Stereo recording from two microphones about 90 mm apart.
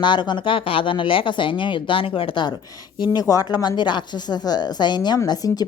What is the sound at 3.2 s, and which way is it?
A woman's voice, 40° left (ahead or behind).